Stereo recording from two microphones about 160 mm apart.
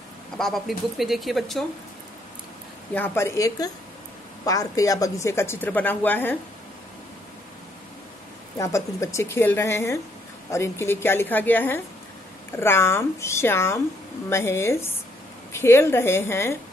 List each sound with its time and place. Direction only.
0.4 s speech: centre (ahead or behind)
2.9 s speech: 15° left (ahead or behind)
8.5 s speech: 20° left (ahead or behind)